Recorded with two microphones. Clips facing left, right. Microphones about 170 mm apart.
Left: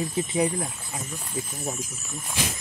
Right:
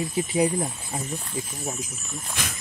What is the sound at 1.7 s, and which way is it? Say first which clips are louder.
Speech: even; centre (ahead or behind).